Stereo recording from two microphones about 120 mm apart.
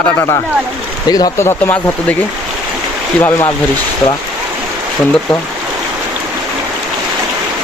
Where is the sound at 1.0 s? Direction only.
35° left (ahead or behind).